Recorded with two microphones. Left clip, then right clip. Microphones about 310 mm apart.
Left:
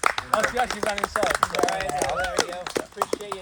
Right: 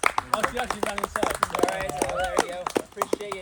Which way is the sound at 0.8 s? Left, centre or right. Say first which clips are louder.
Left 2 dB; right.